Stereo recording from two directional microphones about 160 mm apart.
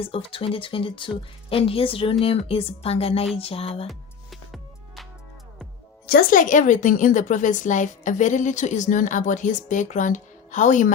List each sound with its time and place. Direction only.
0.0 s a woman's voice: 35° left (ahead or behind)
3.8 s music: centre (ahead or behind)
6.1 s a woman's voice: 65° left (ahead or behind)